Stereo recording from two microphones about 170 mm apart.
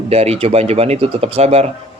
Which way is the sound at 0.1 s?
35° right (ahead or behind).